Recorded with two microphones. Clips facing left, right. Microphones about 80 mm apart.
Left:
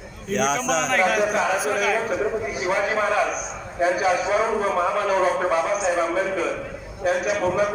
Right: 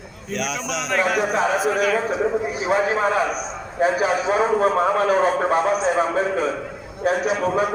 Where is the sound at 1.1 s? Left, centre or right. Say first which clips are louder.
Right 1 dB; right.